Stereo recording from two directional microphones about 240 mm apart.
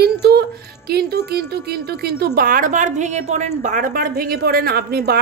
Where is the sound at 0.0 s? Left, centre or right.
Right.